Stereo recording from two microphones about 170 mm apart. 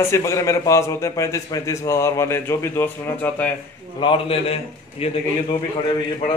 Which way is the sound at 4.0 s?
30° left (ahead or behind).